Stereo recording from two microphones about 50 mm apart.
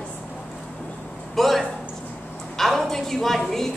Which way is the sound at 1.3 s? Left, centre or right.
Centre.